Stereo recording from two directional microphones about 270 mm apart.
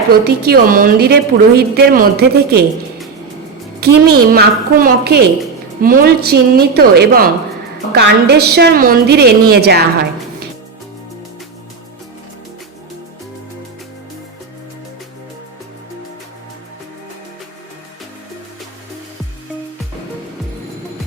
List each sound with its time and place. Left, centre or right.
0.1 s a woman's voice: right
3.8 s a woman's voice: right